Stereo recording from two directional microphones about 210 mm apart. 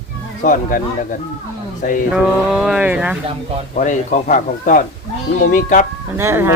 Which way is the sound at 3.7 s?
40° left (ahead or behind).